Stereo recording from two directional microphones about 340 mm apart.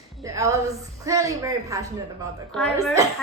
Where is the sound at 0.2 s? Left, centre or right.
Centre.